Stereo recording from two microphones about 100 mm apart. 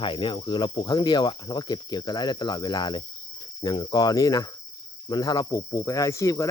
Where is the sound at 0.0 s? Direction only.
55° left (ahead or behind).